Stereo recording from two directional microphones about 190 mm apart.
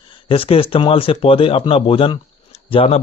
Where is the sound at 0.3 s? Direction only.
30° left (ahead or behind).